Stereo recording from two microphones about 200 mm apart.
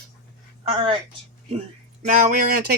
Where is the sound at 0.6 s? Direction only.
25° right (ahead or behind).